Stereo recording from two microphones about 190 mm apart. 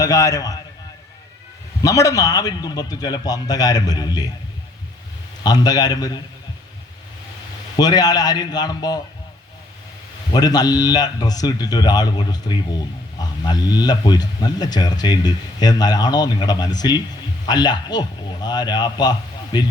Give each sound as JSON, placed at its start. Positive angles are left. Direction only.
{"t": 0.0, "sound": "speech", "side_deg": 20}
{"t": 1.8, "sound": "speech", "side_deg": 15}
{"t": 5.4, "sound": "speech", "side_deg": 20}
{"t": 7.8, "sound": "speech", "side_deg": 20}
{"t": 10.3, "sound": "speech", "side_deg": 20}